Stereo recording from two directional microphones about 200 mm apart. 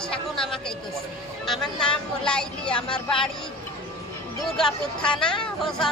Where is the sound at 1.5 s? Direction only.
Centre (ahead or behind).